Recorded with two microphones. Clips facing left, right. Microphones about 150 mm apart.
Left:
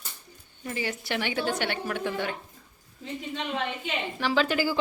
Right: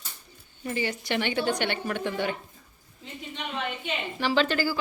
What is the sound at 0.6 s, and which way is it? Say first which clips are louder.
A woman's voice: right 2 dB; centre (ahead or behind).